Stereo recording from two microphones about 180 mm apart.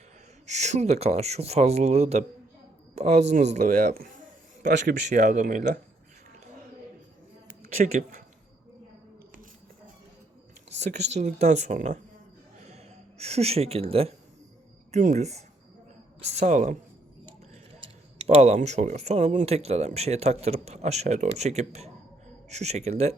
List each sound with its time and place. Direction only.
0.4 s speech: 40° right (ahead or behind)
7.9 s speech: 40° right (ahead or behind)
10.8 s speech: 40° right (ahead or behind)
18.2 s speech: 35° right (ahead or behind)